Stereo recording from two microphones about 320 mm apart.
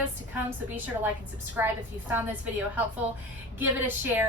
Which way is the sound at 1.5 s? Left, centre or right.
Centre.